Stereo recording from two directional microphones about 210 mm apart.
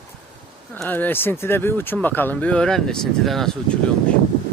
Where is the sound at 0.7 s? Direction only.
10° left (ahead or behind).